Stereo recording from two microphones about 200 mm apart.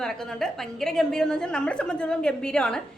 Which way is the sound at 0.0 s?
5° left (ahead or behind).